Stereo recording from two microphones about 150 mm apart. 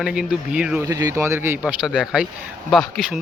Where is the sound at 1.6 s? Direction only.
5° right (ahead or behind).